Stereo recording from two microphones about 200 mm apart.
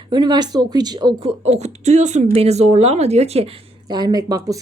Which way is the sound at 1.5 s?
35° right (ahead or behind).